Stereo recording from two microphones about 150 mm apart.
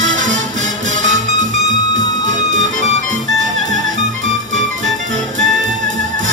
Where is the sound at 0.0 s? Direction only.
55° right (ahead or behind).